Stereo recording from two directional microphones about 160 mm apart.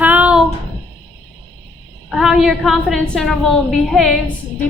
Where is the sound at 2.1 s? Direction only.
Centre (ahead or behind).